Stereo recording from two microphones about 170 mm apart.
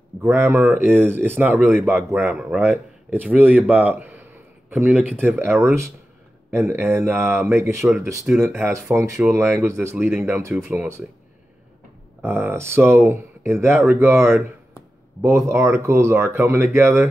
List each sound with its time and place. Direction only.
0.2 s speech: 15° right (ahead or behind)
2.2 s speech: centre (ahead or behind)
2.6 s speech: 10° right (ahead or behind)
12.2 s speech: 10° right (ahead or behind)